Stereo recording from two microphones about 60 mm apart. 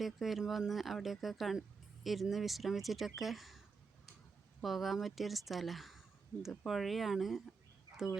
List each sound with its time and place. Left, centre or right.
0.0 s speech: centre
4.6 s speech: centre